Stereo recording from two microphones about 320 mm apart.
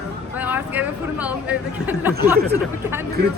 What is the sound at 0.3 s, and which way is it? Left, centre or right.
Speech, centre.